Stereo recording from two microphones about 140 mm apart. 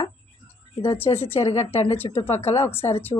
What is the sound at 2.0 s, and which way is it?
Speech, 35° left (ahead or behind).